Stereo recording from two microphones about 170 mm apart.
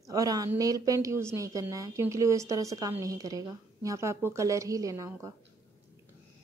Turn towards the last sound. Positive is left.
turn(degrees=-20)  # may be behind; listen again after turning